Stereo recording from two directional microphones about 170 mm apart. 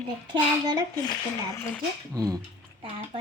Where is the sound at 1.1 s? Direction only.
15° left (ahead or behind).